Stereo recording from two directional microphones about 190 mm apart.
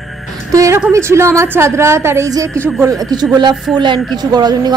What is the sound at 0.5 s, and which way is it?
A woman's voice, 15° right (ahead or behind).